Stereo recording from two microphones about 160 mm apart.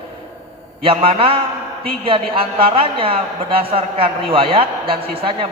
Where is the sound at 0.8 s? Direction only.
35° right (ahead or behind).